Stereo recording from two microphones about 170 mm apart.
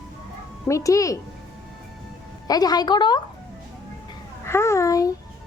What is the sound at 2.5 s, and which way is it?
Speech, 25° left (ahead or behind).